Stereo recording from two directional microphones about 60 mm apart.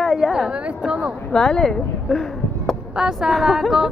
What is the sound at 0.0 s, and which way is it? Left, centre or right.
Speech, centre.